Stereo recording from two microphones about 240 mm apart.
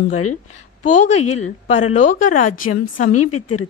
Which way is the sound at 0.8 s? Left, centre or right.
Left.